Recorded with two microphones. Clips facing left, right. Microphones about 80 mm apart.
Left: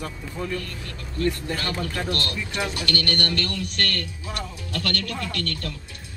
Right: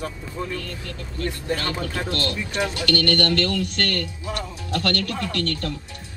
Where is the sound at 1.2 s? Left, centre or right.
Right.